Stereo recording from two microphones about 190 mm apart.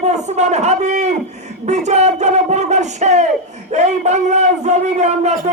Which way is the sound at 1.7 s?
35° right (ahead or behind).